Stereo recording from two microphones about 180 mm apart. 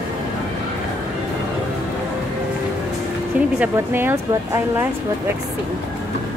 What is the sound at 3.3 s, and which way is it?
Speech, 5° right (ahead or behind).